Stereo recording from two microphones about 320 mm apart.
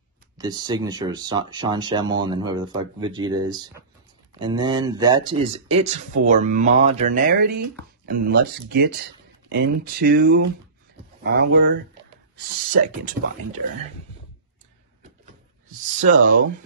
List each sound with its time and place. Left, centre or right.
0.4 s speech: centre
16.0 s speech: right